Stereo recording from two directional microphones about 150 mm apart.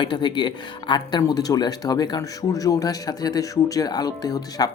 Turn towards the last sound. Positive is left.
turn(degrees=25)  # may be behind; listen again after turning